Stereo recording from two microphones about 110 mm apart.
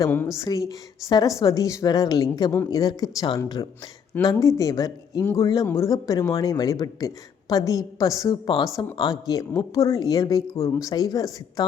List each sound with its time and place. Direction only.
0.5 s a woman's voice: 35° left (ahead or behind)